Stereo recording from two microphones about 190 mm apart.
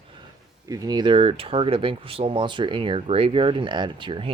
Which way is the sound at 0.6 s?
20° right (ahead or behind).